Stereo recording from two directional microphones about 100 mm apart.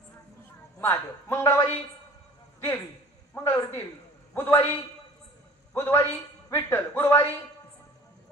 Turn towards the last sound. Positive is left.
turn(degrees=25)  # may be behind; listen again after turning